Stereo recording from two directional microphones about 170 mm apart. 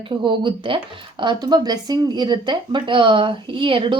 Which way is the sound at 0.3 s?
30° right (ahead or behind).